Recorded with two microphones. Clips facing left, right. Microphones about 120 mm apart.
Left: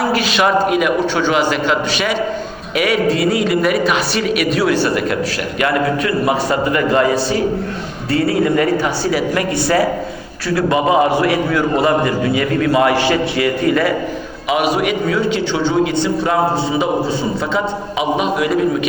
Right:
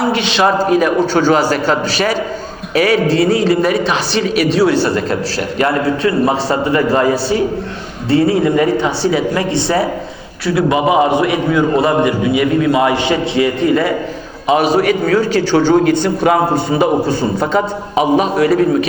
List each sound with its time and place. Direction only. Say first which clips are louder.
0.1 s a woman's voice: right 1 dB; 25° right (ahead or behind)
8.1 s a man's voice: right 3 dB; 25° right (ahead or behind); by 16.8 s 55° right (ahead or behind)
17.1 s a woman's voice: right 4 dB; 45° right (ahead or behind)